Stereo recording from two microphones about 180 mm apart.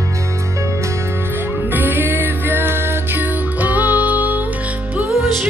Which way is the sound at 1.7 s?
10° right (ahead or behind).